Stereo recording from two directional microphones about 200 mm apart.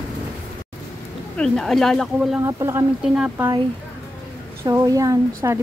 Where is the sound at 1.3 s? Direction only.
5° left (ahead or behind).